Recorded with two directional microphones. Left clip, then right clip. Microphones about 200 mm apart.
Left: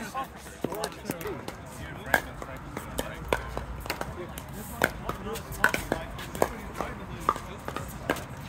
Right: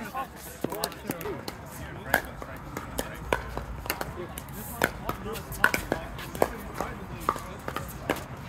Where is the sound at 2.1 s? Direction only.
Centre (ahead or behind).